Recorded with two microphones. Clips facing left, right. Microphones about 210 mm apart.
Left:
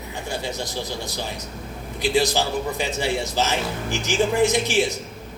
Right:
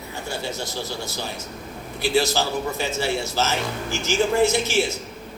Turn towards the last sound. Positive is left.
turn(degrees=15)  # may be behind; listen again after turning